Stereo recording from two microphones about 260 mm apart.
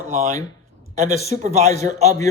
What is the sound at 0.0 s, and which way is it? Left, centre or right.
Speech, right.